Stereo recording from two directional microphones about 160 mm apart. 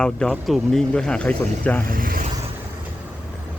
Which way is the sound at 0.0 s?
5° left (ahead or behind).